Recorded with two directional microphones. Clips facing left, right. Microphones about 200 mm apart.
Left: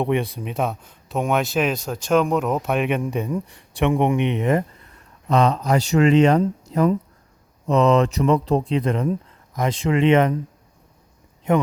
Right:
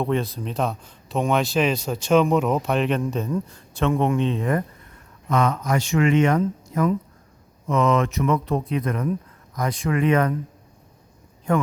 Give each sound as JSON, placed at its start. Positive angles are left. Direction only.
{"t": 0.0, "sound": "a man's voice", "side_deg": 15}
{"t": 5.3, "sound": "speech", "side_deg": 35}